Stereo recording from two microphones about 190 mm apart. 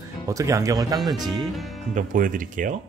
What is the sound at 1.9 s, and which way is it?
Speech, 45° right (ahead or behind).